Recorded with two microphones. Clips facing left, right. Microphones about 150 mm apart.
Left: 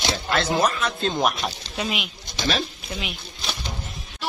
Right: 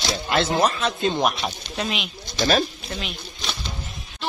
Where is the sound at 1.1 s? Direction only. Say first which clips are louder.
Right 1 dB; centre (ahead or behind).